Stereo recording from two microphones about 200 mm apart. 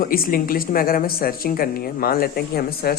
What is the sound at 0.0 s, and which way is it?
Speech, 45° left (ahead or behind).